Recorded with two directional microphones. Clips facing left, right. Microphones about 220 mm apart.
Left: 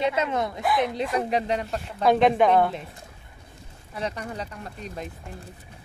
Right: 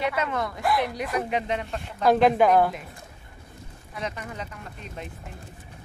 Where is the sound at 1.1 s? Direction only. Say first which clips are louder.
Even; 35° left (ahead or behind).